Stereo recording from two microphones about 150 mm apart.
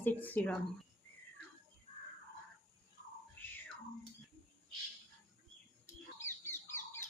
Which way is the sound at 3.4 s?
10° left (ahead or behind).